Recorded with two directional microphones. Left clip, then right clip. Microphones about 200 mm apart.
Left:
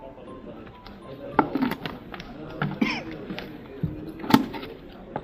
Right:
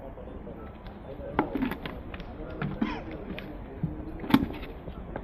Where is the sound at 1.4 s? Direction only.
Centre (ahead or behind).